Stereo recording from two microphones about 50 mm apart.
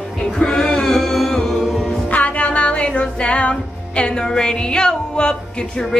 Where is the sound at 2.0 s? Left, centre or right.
Left.